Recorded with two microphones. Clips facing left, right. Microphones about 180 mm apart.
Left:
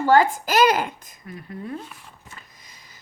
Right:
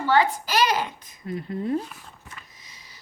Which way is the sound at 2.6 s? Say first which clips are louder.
Even; 50° left (ahead or behind).